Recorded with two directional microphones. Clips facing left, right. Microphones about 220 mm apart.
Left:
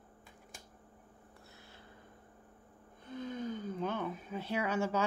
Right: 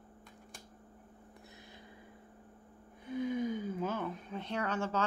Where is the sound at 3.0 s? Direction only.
10° right (ahead or behind).